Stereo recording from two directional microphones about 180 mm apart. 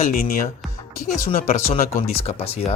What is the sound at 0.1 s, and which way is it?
Speech, 55° left (ahead or behind).